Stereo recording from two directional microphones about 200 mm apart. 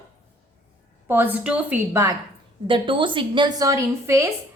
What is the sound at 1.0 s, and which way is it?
A woman's voice, 10° right (ahead or behind).